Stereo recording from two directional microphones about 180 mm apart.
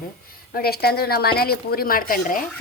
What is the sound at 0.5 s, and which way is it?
A woman's voice, 60° left (ahead or behind).